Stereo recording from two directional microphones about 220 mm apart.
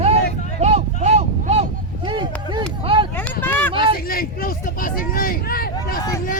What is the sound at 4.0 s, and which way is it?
Hubbub, 40° left (ahead or behind).